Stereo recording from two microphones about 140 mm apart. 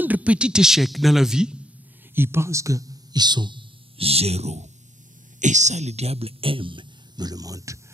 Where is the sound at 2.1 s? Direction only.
15° right (ahead or behind).